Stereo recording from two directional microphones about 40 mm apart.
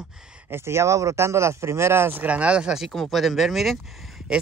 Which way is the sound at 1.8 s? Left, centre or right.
Right.